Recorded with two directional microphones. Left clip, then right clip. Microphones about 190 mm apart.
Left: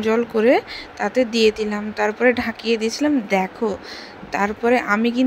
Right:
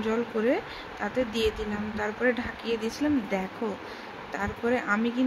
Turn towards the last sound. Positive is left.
turn(degrees=40)  # may be behind; listen again after turning